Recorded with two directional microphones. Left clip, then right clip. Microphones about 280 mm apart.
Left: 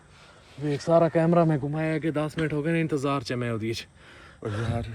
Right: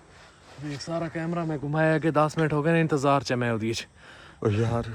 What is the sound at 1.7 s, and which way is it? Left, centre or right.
Speech, centre.